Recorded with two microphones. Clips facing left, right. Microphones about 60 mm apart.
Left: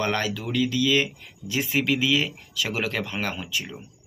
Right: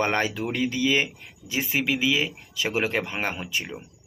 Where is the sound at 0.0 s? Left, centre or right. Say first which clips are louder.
Right 2 dB; right.